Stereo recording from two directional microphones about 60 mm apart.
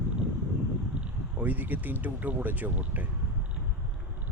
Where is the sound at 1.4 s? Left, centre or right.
Right.